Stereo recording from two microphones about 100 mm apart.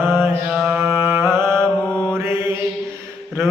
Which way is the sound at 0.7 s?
20° right (ahead or behind).